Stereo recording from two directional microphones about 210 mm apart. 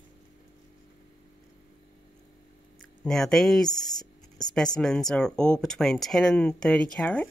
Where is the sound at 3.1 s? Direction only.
Centre (ahead or behind).